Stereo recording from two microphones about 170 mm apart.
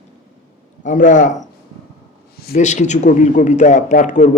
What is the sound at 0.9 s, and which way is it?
Speech, 45° left (ahead or behind).